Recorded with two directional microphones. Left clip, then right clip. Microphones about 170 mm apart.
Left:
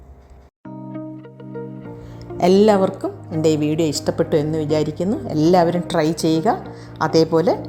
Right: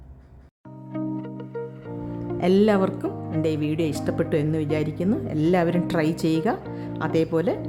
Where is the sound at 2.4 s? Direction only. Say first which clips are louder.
Left 6 dB; 5° left (ahead or behind).